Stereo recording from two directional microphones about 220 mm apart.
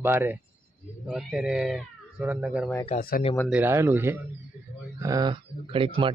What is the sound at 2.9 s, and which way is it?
Speech, 40° left (ahead or behind).